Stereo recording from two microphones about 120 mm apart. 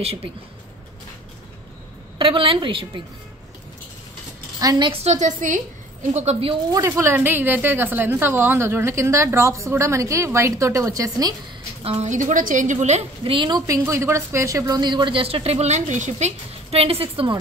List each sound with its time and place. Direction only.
0.0 s a woman's voice: 50° right (ahead or behind)
2.1 s a woman's voice: 45° right (ahead or behind)
4.6 s a woman's voice: 35° right (ahead or behind)
4.9 s a woman's voice: 70° right (ahead or behind); by 5.6 s 90° right
6.1 s speech: 65° right (ahead or behind)
6.7 s a woman's voice: 25° right (ahead or behind)
11.8 s a woman's voice: 55° right (ahead or behind)
12.1 s a woman's voice: 90° right
13.2 s a woman's voice: 45° right (ahead or behind)